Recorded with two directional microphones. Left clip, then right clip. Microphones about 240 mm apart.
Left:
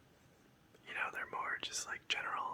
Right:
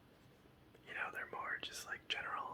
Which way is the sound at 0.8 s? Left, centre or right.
Centre.